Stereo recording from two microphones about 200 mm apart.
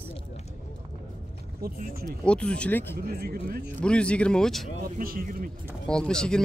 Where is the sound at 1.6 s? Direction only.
50° right (ahead or behind).